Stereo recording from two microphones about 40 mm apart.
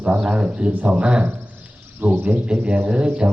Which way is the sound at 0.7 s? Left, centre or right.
Right.